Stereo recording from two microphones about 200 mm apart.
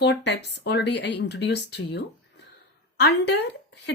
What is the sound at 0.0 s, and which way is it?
Speech, 60° left (ahead or behind).